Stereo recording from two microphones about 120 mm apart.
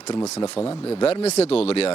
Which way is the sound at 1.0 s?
60° left (ahead or behind).